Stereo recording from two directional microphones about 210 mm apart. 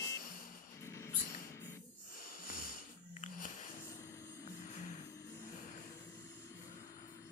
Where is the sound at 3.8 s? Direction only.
15° left (ahead or behind).